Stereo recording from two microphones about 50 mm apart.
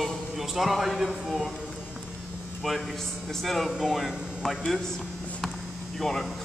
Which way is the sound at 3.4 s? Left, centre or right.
Centre.